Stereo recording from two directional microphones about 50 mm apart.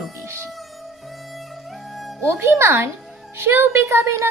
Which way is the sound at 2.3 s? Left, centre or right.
Right.